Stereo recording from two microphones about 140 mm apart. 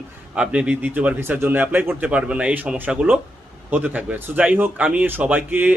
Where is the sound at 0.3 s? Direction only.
10° right (ahead or behind).